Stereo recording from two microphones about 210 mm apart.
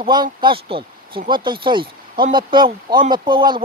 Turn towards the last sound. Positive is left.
turn(degrees=-20)  # may be behind; listen again after turning